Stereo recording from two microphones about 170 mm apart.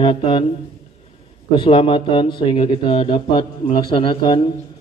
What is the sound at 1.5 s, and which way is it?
Speech, 30° left (ahead or behind).